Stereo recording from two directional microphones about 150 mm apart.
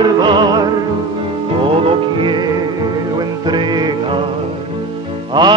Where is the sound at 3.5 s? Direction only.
30° right (ahead or behind).